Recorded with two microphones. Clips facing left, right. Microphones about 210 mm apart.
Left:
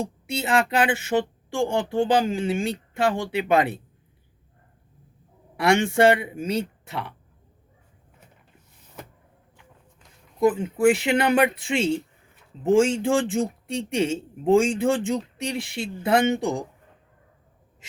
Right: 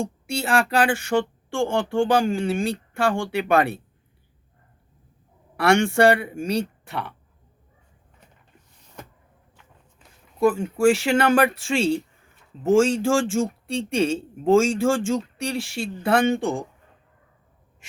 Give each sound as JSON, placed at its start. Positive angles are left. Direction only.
{"t": 0.0, "sound": "speech", "side_deg": 20}
{"t": 5.5, "sound": "speech", "side_deg": 20}
{"t": 10.4, "sound": "speech", "side_deg": 20}